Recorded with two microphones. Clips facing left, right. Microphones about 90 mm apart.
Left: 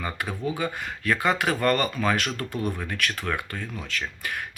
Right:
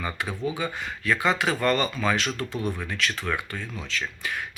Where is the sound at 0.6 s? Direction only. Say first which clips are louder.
Left 1 dB; 45° left (ahead or behind).